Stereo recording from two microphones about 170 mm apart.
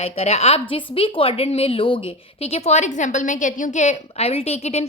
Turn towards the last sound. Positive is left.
turn(degrees=40)  # may be behind; listen again after turning